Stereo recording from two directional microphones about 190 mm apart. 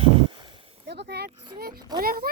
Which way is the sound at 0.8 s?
60° right (ahead or behind).